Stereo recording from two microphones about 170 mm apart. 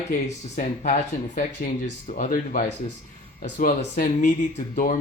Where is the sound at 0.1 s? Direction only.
45° left (ahead or behind).